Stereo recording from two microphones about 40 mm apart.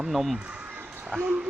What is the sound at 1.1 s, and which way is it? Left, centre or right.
Speech, right.